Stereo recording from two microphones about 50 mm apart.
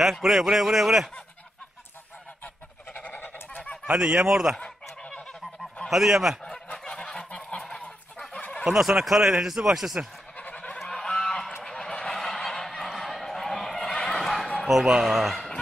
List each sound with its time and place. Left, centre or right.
0.0 s a man's voice: centre
2.4 s goose: left
3.8 s a man's voice: centre
4.6 s goose: centre
5.9 s a man's voice: centre
6.4 s goose: centre
8.2 s fowl: centre
8.6 s speech: centre
10.3 s honk: left
10.8 s goose: centre
11.1 s honk: centre
14.2 s chuckle: centre
14.7 s a man's voice: centre